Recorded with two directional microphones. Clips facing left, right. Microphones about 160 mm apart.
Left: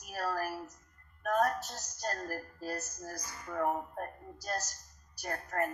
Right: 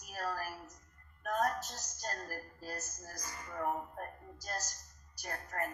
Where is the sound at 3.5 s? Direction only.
75° left (ahead or behind).